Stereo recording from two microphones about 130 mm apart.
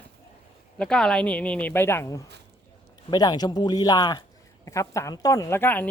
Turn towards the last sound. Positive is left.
turn(degrees=15)  # may be behind; listen again after turning